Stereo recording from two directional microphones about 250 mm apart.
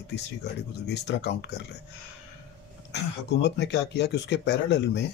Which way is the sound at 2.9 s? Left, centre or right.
Left.